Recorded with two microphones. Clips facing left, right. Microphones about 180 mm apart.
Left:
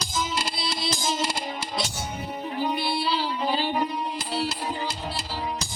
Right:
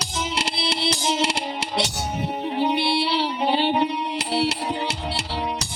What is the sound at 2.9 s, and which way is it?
Music, 70° right (ahead or behind).